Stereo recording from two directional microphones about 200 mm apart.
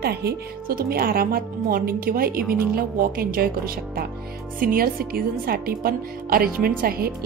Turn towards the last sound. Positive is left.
turn(degrees=-50)  # may be behind; listen again after turning